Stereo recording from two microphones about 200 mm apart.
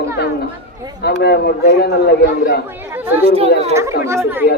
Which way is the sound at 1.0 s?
55° left (ahead or behind).